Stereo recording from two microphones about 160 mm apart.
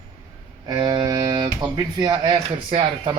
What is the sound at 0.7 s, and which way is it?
Speech, 30° right (ahead or behind).